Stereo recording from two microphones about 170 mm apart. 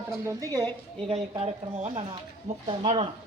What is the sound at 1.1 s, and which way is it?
Speech, 40° right (ahead or behind).